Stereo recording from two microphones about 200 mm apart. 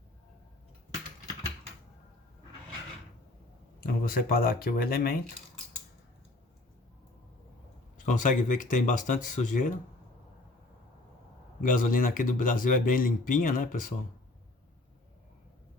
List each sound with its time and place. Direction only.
3.8 s speech: 50° left (ahead or behind)
7.9 s speech: 40° left (ahead or behind)
11.6 s speech: 40° left (ahead or behind)